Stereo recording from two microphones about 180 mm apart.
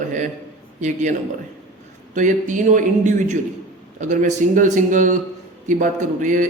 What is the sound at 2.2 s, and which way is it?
Speech, 45° right (ahead or behind).